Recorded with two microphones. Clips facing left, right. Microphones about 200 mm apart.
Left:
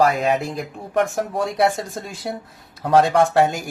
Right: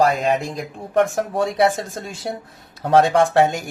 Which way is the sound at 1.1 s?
Centre (ahead or behind).